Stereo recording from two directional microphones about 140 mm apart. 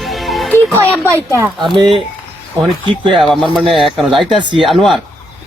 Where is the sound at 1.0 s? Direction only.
20° right (ahead or behind).